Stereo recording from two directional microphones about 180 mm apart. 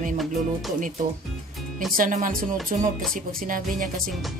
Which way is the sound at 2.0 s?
45° right (ahead or behind).